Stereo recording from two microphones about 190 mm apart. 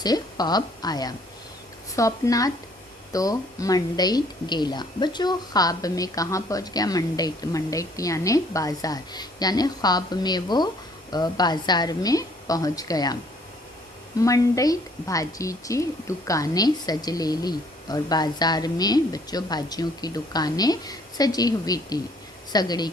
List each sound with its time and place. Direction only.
0.0 s a woman's voice: 20° left (ahead or behind)
14.2 s a woman's voice: 15° left (ahead or behind)